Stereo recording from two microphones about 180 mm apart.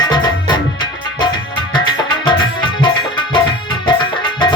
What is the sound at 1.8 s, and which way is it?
Music, 25° left (ahead or behind).